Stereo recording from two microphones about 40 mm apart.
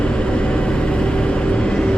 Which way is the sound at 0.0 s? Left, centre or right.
Left.